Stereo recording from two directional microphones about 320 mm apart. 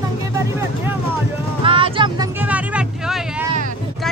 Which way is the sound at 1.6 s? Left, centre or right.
Centre.